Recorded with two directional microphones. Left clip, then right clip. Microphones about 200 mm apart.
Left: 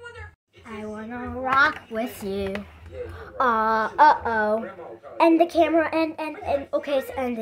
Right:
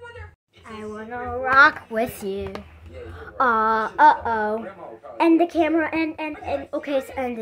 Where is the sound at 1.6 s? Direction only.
45° right (ahead or behind).